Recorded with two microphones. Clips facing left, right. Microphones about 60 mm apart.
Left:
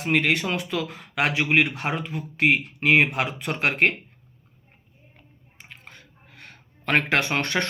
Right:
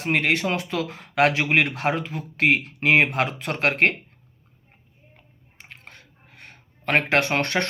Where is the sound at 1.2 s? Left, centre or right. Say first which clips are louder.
Right 2 dB; right.